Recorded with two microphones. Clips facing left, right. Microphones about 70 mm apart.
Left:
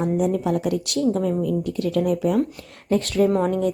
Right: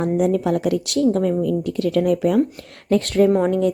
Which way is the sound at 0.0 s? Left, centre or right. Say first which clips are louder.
Right 3 dB; right.